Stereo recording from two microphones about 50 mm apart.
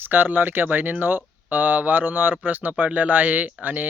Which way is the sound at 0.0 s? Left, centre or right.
Right.